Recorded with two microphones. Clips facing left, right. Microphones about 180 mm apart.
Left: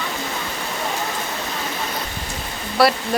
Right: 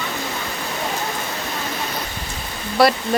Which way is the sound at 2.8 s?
Centre (ahead or behind).